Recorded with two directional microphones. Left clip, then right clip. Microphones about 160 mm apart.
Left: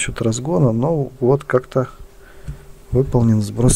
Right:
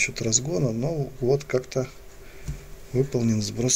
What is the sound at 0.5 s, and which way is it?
Speech, 60° left (ahead or behind).